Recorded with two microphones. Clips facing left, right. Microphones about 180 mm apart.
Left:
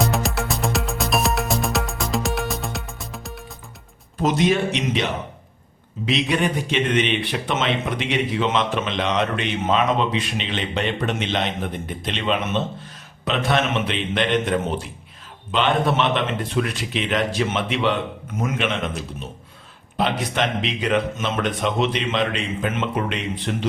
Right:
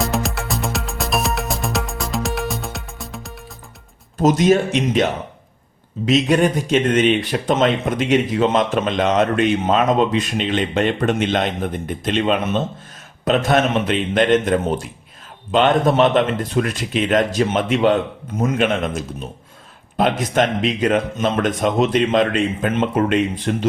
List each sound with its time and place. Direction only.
0.0 s music: centre (ahead or behind)
4.2 s speech: 40° right (ahead or behind)